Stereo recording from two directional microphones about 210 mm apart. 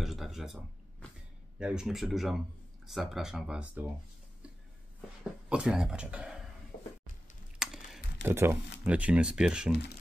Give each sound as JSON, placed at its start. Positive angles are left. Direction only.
{"t": 0.0, "sound": "speech", "side_deg": 0}
{"t": 5.5, "sound": "speech", "side_deg": -5}
{"t": 7.5, "sound": "computer keyboard", "side_deg": -5}
{"t": 8.8, "sound": "speech", "side_deg": -5}